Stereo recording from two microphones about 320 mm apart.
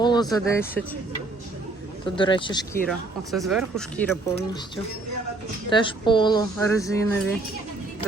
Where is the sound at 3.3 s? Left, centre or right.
Centre.